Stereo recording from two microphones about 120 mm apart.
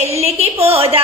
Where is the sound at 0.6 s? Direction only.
55° right (ahead or behind).